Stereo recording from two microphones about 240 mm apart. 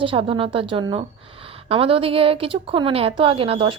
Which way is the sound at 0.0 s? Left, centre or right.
Right.